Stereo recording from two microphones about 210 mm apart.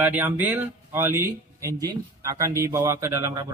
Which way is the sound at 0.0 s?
10° right (ahead or behind).